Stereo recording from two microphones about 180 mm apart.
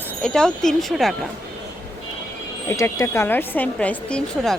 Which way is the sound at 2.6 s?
15° left (ahead or behind).